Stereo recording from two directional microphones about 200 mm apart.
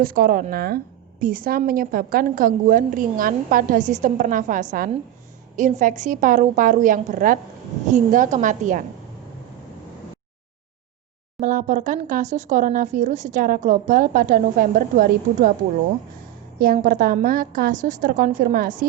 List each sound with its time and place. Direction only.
0.0 s a woman's voice: 45° right (ahead or behind)
11.3 s speech: 40° right (ahead or behind)
16.6 s a woman's voice: 45° right (ahead or behind)